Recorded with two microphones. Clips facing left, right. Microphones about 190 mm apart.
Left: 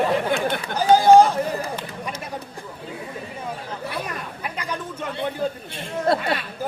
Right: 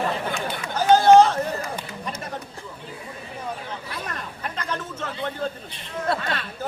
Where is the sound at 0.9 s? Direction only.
10° left (ahead or behind).